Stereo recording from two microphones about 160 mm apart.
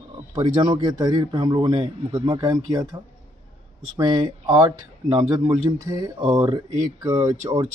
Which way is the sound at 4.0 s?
25° right (ahead or behind).